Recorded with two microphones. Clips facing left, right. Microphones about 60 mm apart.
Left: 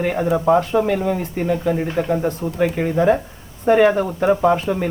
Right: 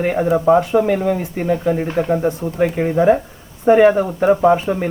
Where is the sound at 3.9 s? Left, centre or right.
Centre.